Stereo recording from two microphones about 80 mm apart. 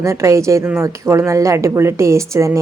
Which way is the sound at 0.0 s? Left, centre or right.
Right.